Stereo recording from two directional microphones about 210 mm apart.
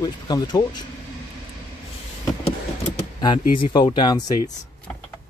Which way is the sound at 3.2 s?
20° left (ahead or behind).